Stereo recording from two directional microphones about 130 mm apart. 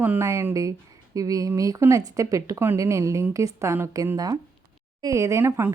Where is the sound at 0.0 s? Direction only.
15° right (ahead or behind).